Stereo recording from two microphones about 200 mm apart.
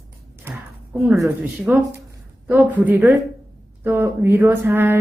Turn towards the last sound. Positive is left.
turn(degrees=-10)  # may be behind; listen again after turning